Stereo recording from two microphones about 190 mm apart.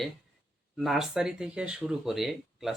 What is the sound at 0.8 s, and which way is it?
Speech, centre (ahead or behind).